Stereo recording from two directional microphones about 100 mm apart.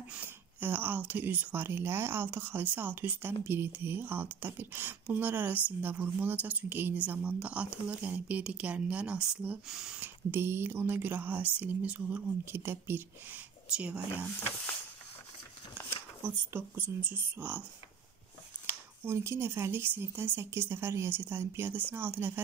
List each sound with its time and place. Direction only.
0.1 s a woman's voice: 20° right (ahead or behind)
9.9 s speech: 20° right (ahead or behind)
13.7 s a woman's voice: 10° right (ahead or behind)
16.5 s speech: 20° right (ahead or behind)
19.0 s speech: 25° right (ahead or behind)